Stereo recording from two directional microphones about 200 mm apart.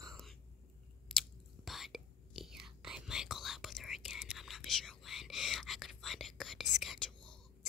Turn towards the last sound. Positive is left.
turn(degrees=0)  # may be behind; listen again after turning